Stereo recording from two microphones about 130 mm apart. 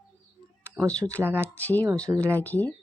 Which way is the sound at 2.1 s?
20° right (ahead or behind).